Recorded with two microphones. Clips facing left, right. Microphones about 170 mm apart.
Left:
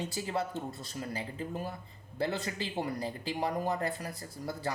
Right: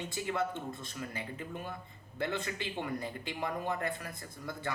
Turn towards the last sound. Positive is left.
turn(degrees=35)  # may be behind; listen again after turning